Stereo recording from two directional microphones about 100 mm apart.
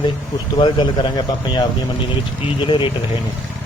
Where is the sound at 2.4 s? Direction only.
60° left (ahead or behind).